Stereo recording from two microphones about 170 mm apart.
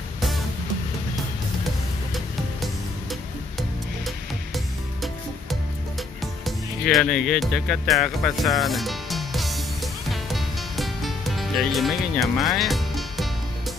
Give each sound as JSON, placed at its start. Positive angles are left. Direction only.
{"t": 2.1, "sound": "music", "side_deg": 0}